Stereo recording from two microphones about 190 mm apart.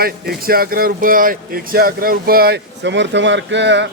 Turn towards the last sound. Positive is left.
turn(degrees=-70)  # may be behind; listen again after turning